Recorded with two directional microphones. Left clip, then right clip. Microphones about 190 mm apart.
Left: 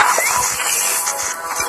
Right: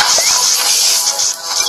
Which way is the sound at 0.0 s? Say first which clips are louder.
Right 3 dB; 40° right (ahead or behind).